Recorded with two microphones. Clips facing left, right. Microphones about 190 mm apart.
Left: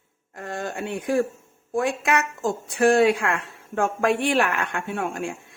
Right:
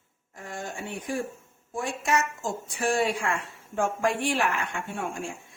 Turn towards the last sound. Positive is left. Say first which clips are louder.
# left 5 dB
turn(degrees=60)  # may be behind; listen again after turning